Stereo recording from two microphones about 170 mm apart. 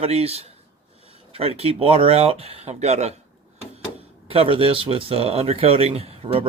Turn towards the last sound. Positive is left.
turn(degrees=-35)  # may be behind; listen again after turning